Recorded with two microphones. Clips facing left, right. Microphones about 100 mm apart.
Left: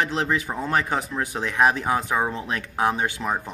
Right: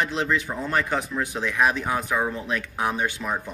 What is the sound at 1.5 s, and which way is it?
Speech, 25° left (ahead or behind).